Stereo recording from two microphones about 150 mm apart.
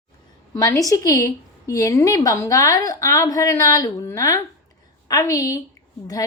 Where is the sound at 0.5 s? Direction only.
20° left (ahead or behind).